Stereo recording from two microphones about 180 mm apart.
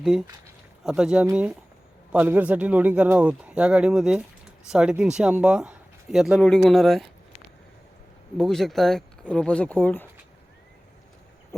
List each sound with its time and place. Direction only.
0.0 s speech: centre (ahead or behind)
8.4 s speech: centre (ahead or behind)